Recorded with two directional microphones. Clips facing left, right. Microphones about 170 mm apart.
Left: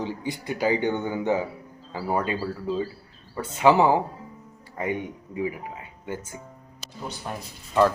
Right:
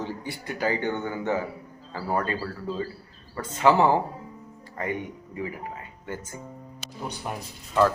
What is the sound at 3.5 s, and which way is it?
Speech, 10° left (ahead or behind).